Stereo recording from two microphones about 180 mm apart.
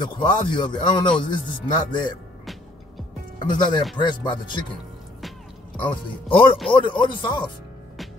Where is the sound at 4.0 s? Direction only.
25° left (ahead or behind).